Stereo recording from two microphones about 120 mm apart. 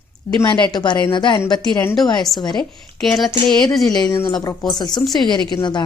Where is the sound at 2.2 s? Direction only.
Centre (ahead or behind).